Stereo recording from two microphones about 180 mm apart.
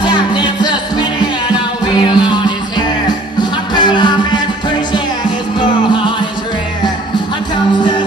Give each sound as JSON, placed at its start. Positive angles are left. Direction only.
{"t": 0.0, "sound": "music", "side_deg": 25}
{"t": 3.7, "sound": "music", "side_deg": 25}